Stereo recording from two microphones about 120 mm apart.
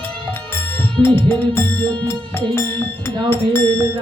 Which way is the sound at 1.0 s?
15° left (ahead or behind).